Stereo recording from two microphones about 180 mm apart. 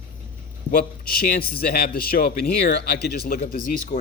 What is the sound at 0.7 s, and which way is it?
A man's voice, 55° left (ahead or behind).